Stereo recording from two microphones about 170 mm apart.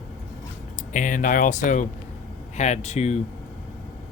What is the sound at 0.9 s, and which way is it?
Speech, 50° left (ahead or behind).